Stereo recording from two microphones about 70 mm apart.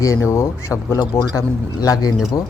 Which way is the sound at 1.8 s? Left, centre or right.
Left.